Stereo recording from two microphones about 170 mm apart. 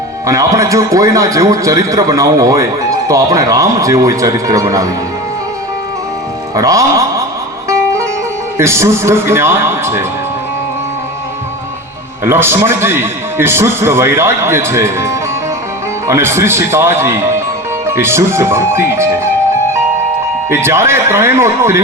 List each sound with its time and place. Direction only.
0.3 s a man's voice: 20° right (ahead or behind)
6.5 s music: 20° right (ahead or behind)
8.5 s a man's voice: 15° right (ahead or behind)
12.2 s a man's voice: 15° right (ahead or behind)
20.5 s a man's voice: 15° right (ahead or behind)